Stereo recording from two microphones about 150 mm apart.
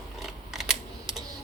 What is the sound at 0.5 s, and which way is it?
Camera, centre (ahead or behind).